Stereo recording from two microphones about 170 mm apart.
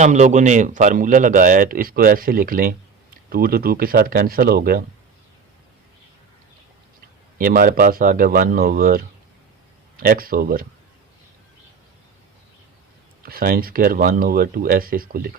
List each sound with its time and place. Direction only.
0.0 s a man's voice: 45° right (ahead or behind); by 4.8 s 65° right (ahead or behind)
7.3 s speech: 55° right (ahead or behind)
13.2 s speech: 60° right (ahead or behind)